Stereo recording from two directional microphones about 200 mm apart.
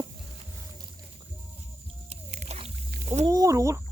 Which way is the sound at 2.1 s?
35° right (ahead or behind).